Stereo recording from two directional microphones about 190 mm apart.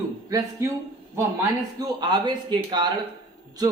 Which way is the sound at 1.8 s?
25° right (ahead or behind).